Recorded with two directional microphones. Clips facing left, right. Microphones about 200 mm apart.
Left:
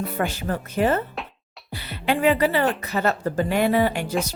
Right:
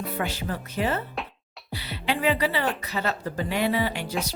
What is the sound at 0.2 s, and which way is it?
Speech, 50° left (ahead or behind).